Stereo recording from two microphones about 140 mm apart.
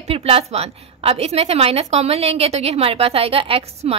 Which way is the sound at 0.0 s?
45° right (ahead or behind).